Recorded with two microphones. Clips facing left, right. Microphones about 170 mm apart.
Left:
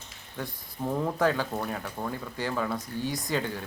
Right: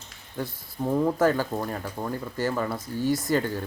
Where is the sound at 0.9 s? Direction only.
5° right (ahead or behind).